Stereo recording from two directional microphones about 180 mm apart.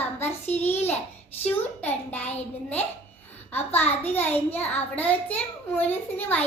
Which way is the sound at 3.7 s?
10° left (ahead or behind).